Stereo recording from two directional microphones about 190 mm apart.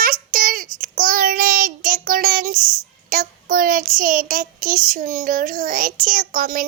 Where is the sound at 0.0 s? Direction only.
45° right (ahead or behind).